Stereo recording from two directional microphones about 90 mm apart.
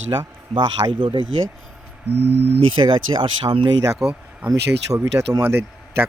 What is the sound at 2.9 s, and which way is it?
Speech, 80° right.